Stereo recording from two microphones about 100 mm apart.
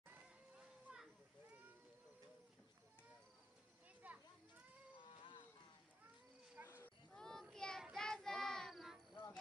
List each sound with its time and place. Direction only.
0.9 s children playing: 10° right (ahead or behind)
4.0 s children playing: 15° right (ahead or behind)
4.9 s cat: 55° left (ahead or behind)
6.6 s a sound: 20° right (ahead or behind)
7.1 s child singing: 5° left (ahead or behind)
9.1 s a sound: 45° left (ahead or behind)